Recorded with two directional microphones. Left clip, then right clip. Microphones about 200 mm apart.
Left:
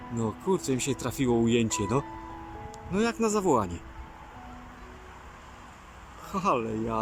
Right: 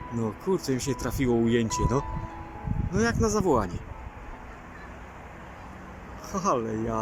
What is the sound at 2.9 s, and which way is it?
Speech, 15° left (ahead or behind).